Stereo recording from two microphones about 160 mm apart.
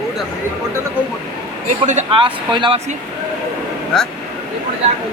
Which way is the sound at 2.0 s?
30° right (ahead or behind).